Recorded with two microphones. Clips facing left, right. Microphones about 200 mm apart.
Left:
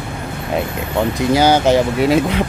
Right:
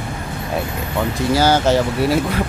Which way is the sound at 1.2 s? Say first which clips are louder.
Left 2 dB; 15° left (ahead or behind).